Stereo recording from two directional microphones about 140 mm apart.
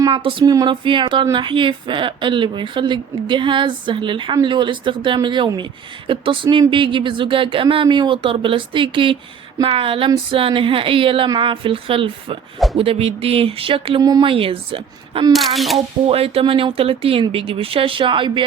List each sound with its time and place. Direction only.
0.0 s a woman's voice: 35° right (ahead or behind)
12.7 s a sound: 45° right (ahead or behind)
14.0 s speech: 25° right (ahead or behind)
14.3 s a woman's voice: 40° right (ahead or behind)
15.3 s speech: centre (ahead or behind)
16.0 s a woman's voice: 45° right (ahead or behind)